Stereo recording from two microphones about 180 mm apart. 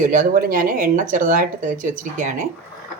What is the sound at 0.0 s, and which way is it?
Speech, 45° right (ahead or behind).